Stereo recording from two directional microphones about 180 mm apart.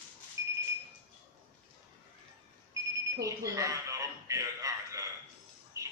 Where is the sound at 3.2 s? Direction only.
20° right (ahead or behind).